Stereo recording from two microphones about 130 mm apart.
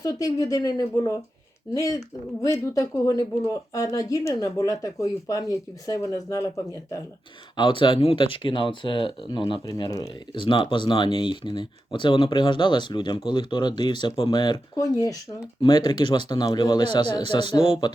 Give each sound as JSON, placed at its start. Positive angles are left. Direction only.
{"t": 0.0, "sound": "speech", "side_deg": 30}
{"t": 7.5, "sound": "speech", "side_deg": 40}
{"t": 9.6, "sound": "speech", "side_deg": 30}
{"t": 10.3, "sound": "speech", "side_deg": 40}